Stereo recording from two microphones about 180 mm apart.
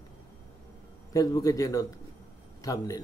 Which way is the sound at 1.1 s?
20° left (ahead or behind).